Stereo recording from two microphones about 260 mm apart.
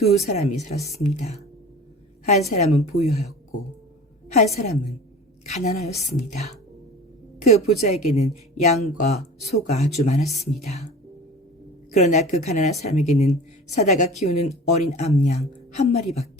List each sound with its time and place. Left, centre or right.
0.0 s speech: left
4.5 s speech: left